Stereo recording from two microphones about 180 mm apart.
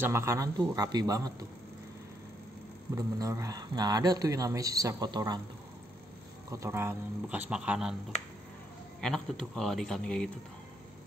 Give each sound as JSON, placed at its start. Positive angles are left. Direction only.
{"t": 0.0, "sound": "speech", "side_deg": -15}
{"t": 3.0, "sound": "speech", "side_deg": -20}
{"t": 6.5, "sound": "speech", "side_deg": -15}
{"t": 9.0, "sound": "a man's voice", "side_deg": 5}